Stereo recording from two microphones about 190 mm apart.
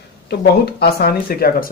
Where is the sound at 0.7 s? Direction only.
55° left (ahead or behind).